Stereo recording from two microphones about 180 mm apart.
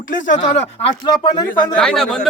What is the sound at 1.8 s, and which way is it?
Speech, 5° left (ahead or behind).